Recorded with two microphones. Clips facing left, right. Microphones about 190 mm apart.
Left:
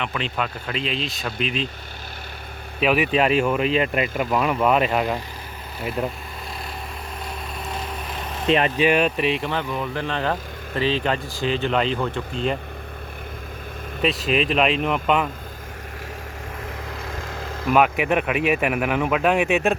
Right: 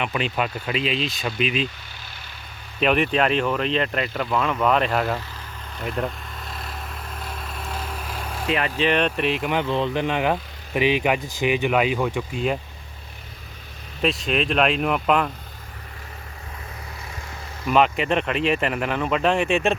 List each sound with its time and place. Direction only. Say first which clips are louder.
0.0 s speech: right 2 dB; 10° right (ahead or behind)
2.8 s speech: left 1 dB; 5° left (ahead or behind)
7.7 s vehicle: left 1 dB; 5° left (ahead or behind)
8.0 s vehicle: left 5 dB; 5° right (ahead or behind)
8.8 s speech: left 2 dB; 10° left (ahead or behind)
9.5 s speech: right 3 dB; 20° right (ahead or behind)
14.0 s speech: left 1 dB; centre (ahead or behind)
17.1 s a sound: left 6 dB; 90° left
17.7 s speech: left 1 dB; 5° left (ahead or behind)